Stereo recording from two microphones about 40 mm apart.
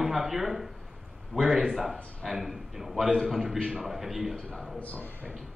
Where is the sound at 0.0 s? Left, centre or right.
Centre.